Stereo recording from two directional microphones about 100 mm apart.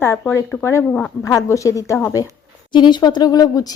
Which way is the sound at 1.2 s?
30° left (ahead or behind).